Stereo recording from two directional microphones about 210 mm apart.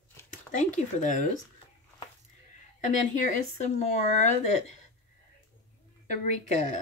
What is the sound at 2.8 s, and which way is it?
A woman's voice, 35° left (ahead or behind).